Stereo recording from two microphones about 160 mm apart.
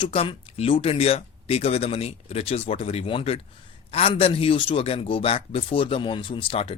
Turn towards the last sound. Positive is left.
turn(degrees=35)  # may be behind; listen again after turning